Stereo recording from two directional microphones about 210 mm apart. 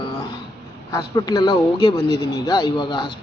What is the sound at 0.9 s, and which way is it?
A man's voice, 20° left (ahead or behind).